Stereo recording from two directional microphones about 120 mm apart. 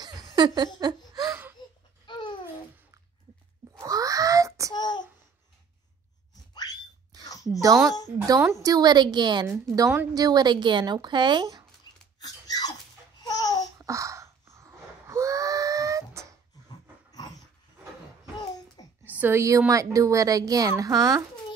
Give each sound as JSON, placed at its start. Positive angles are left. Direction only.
{"t": 0.0, "sound": "a sound", "side_deg": -35}
{"t": 0.7, "sound": "laughter", "side_deg": -35}
{"t": 2.0, "sound": "babbling", "side_deg": 40}
{"t": 3.8, "sound": "wail", "side_deg": -30}
{"t": 4.7, "sound": "child singing", "side_deg": 35}
{"t": 6.5, "sound": "a sound", "side_deg": 35}
{"t": 7.6, "sound": "a woman's voice", "side_deg": -30}
{"t": 9.8, "sound": "a woman's voice", "side_deg": -25}
{"t": 11.9, "sound": "a sound", "side_deg": 40}
{"t": 13.2, "sound": "babbling", "side_deg": 30}
{"t": 13.7, "sound": "gasp", "side_deg": -25}
{"t": 19.0, "sound": "a woman's voice", "side_deg": -15}